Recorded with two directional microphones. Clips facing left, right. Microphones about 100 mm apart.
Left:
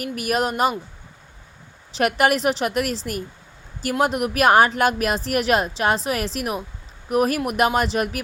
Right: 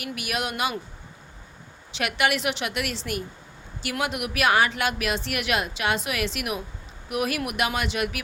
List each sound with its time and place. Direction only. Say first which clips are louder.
0.0 s a woman's voice: left 7 dB; 40° left (ahead or behind)
1.9 s a woman's voice: left 6 dB; 40° left (ahead or behind)